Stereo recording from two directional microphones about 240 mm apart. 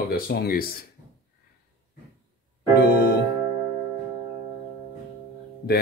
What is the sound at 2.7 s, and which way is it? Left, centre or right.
Music, left.